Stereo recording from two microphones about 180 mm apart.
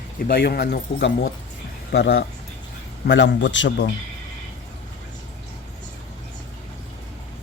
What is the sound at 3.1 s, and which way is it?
Speech, 90° left.